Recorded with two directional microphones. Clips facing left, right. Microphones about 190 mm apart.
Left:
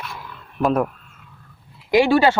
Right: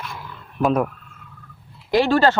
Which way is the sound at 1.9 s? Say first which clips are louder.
Left 2 dB; 15° left (ahead or behind).